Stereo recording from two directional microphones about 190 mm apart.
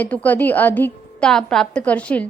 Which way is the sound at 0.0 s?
10° left (ahead or behind).